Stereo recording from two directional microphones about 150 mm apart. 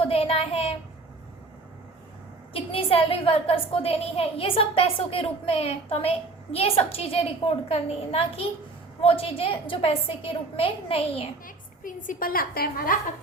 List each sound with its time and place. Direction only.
0.0 s a woman's voice: 40° left (ahead or behind)
2.5 s a woman's voice: 40° left (ahead or behind)
11.4 s a woman's voice: 65° left (ahead or behind)